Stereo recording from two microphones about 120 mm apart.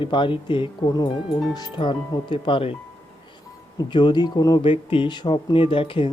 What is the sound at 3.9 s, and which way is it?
Speech, 40° left (ahead or behind).